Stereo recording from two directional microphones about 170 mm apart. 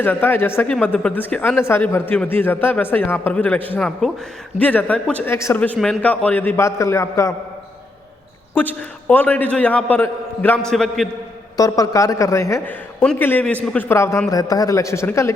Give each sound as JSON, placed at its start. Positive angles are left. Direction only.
{"t": 0.0, "sound": "a man's voice", "side_deg": 10}
{"t": 8.5, "sound": "a man's voice", "side_deg": 10}
{"t": 11.5, "sound": "a man's voice", "side_deg": 20}